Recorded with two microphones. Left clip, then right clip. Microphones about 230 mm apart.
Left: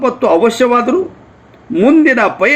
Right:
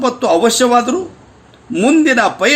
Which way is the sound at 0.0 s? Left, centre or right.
Centre.